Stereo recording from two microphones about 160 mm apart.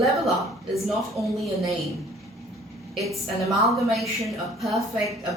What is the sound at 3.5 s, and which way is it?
A woman's voice, centre (ahead or behind).